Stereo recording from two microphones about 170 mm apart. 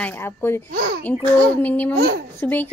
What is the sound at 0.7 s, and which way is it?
Speech, 65° right (ahead or behind).